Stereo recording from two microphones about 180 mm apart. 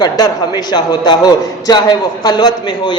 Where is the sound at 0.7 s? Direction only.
25° left (ahead or behind).